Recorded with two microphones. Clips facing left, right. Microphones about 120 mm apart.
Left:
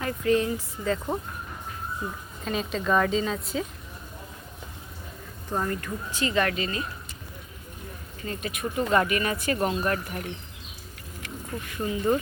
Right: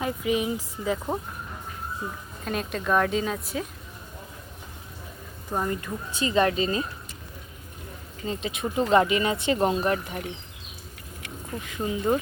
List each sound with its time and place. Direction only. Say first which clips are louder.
0.0 s speech: left 2 dB; 10° right (ahead or behind)
2.4 s a woman's voice: left 1 dB; centre (ahead or behind)
5.5 s speech: right 1 dB; 15° right (ahead or behind)
8.3 s speech: right 2 dB; 20° right (ahead or behind)
11.8 s speech: even; 15° right (ahead or behind)